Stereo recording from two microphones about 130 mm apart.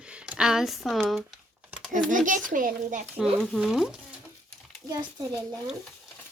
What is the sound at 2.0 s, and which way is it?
Speech, 85° right.